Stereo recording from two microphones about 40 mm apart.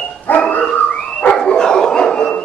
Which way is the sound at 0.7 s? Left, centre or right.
Left.